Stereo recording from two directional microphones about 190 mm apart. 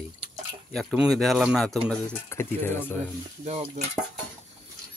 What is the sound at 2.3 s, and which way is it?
Speech, 10° left (ahead or behind).